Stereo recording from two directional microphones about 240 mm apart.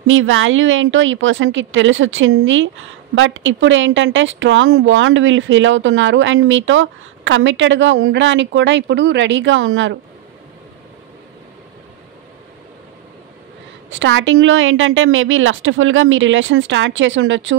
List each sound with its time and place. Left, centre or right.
0.0 s a woman's voice: right
13.8 s a woman's voice: right